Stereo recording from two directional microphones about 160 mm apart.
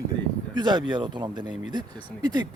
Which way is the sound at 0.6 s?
25° right (ahead or behind).